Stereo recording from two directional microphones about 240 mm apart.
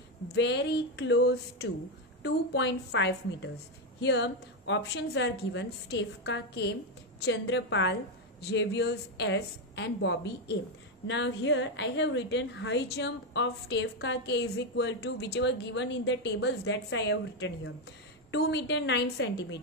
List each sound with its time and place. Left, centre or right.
0.3 s a woman's voice: left